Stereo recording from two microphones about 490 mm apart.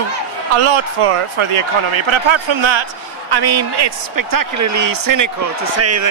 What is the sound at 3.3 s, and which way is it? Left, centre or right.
A man's voice, right.